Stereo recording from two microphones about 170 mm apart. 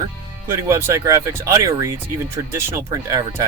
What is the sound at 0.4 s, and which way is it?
Speech, 15° right (ahead or behind).